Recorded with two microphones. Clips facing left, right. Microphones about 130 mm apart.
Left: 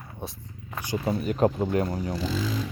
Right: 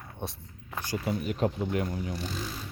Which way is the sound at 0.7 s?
15° left (ahead or behind).